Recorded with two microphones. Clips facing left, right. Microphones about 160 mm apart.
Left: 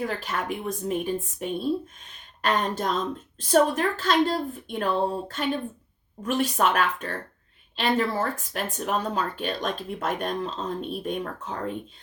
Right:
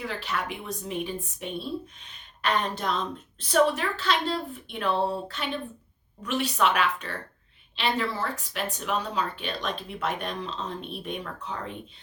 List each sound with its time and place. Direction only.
0.0 s a woman's voice: 45° left (ahead or behind)